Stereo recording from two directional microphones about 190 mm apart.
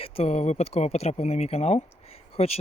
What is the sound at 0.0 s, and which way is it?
Speech, 35° left (ahead or behind).